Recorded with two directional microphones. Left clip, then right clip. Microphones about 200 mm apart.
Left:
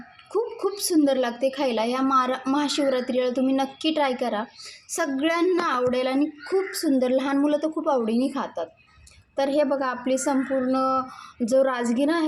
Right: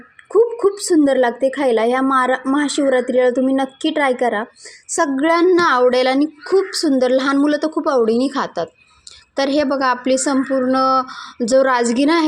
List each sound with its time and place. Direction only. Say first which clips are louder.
0.9 s speech: right 6 dB; 20° right (ahead or behind)